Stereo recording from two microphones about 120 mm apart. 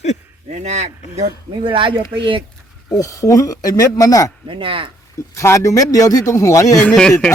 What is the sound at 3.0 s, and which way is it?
Speech, 30° left (ahead or behind).